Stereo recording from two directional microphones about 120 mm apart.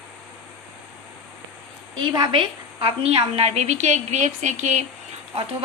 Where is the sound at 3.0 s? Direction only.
60° right (ahead or behind); by 4.8 s 80° right.